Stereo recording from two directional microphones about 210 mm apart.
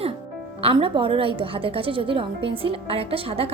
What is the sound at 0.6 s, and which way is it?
A woman's voice, 25° right (ahead or behind).